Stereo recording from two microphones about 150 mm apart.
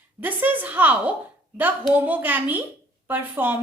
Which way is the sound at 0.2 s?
10° right (ahead or behind).